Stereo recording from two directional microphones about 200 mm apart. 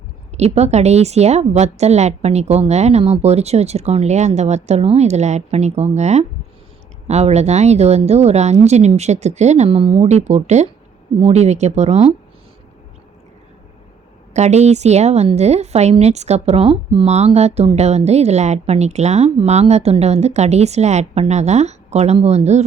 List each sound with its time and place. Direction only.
0.3 s a woman's voice: 35° right (ahead or behind)
14.3 s a woman's voice: 35° right (ahead or behind)